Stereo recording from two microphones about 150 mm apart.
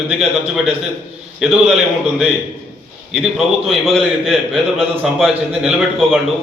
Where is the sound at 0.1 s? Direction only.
Centre (ahead or behind).